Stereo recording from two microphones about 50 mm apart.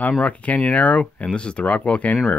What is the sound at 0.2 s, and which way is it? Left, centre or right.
Speech, left.